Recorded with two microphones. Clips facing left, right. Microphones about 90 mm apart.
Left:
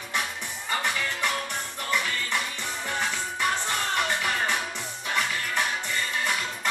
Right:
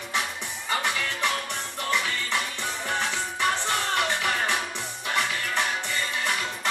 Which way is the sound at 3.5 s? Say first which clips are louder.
Right 2 dB; 10° left (ahead or behind).